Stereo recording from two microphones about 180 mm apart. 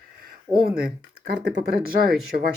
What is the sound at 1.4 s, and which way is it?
Speech, 65° right (ahead or behind).